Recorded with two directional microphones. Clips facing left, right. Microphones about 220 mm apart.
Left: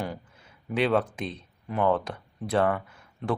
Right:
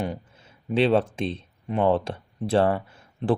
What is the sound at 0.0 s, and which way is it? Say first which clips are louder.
Speech: right 4 dB; 25° right (ahead or behind).